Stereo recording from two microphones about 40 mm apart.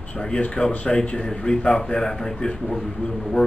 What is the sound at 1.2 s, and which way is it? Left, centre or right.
A man's voice, centre.